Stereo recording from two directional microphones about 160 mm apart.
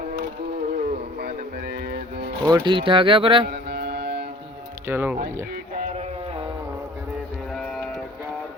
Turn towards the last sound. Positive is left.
turn(degrees=0)  # may be behind; listen again after turning